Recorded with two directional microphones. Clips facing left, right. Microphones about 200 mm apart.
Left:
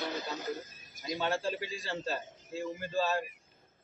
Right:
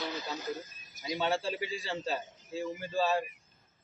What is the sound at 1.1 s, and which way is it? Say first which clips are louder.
A man's voice: right 1 dB; 15° right (ahead or behind).